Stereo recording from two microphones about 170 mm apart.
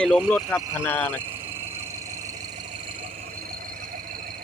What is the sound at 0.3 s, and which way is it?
Speech, 5° left (ahead or behind).